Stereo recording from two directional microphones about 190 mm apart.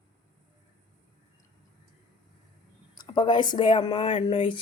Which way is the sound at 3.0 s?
25° left (ahead or behind).